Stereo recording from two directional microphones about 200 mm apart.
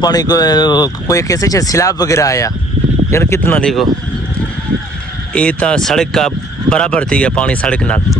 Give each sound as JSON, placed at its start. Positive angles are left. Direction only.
{"t": 0.0, "sound": "speech", "side_deg": 20}
{"t": 5.3, "sound": "speech", "side_deg": 5}